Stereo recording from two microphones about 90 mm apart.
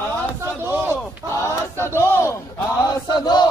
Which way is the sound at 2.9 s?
50° left (ahead or behind).